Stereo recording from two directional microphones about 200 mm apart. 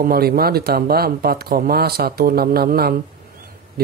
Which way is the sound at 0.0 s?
45° right (ahead or behind).